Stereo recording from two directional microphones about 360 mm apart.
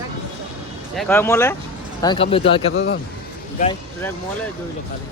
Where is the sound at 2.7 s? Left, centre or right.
Left.